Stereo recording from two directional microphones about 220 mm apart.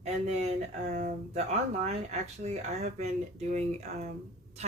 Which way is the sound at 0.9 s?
35° right (ahead or behind).